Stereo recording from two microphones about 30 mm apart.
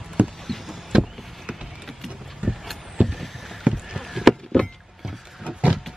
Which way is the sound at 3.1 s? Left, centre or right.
Centre.